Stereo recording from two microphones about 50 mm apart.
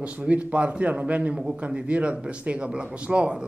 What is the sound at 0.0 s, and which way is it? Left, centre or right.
A man's voice, right.